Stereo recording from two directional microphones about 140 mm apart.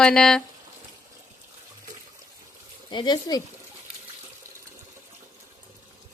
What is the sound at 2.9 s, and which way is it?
Speech, 30° left (ahead or behind).